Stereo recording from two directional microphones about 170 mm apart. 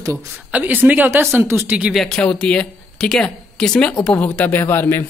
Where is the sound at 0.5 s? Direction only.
10° right (ahead or behind).